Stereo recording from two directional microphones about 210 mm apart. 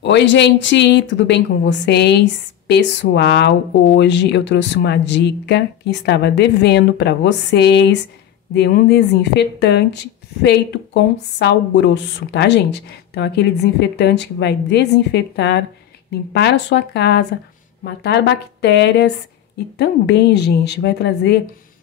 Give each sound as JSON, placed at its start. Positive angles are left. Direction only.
{"t": 0.0, "sound": "a woman's voice", "side_deg": 60}